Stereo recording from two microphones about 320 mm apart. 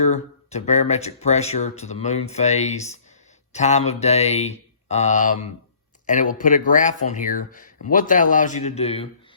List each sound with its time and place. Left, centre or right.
0.0 s speech: left